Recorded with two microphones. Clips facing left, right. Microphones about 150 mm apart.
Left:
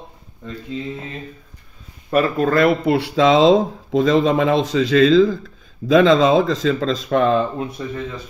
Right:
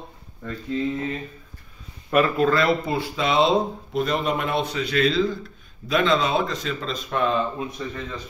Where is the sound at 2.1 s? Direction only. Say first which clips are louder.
Left 3 dB; 40° left (ahead or behind); by 4.9 s 90° left.